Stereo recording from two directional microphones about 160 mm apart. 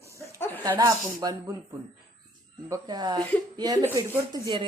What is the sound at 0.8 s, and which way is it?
Speech, 25° right (ahead or behind).